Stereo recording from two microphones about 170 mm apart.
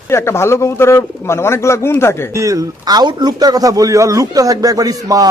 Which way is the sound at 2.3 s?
20° right (ahead or behind).